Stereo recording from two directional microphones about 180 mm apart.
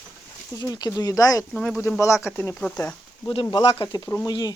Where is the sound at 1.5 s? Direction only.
Centre (ahead or behind).